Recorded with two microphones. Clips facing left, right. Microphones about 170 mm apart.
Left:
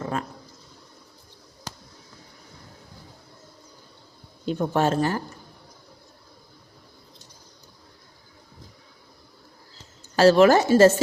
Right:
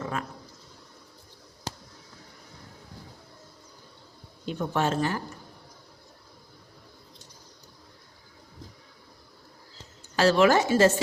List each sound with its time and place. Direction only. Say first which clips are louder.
0.0 s a sound: left 3 dB; 35° left (ahead or behind)
4.4 s speech: left 5 dB; 40° left (ahead or behind)
10.2 s speech: left 5 dB; 40° left (ahead or behind)